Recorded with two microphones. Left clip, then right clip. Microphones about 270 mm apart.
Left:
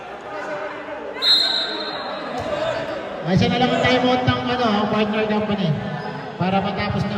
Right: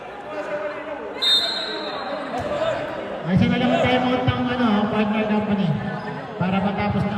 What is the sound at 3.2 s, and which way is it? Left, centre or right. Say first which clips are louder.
A man's voice: left 3 dB; left.